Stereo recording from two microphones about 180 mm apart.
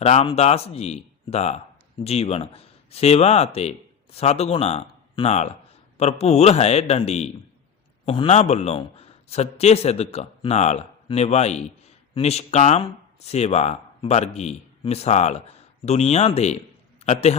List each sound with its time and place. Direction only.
0.0 s a man's voice: 35° left (ahead or behind)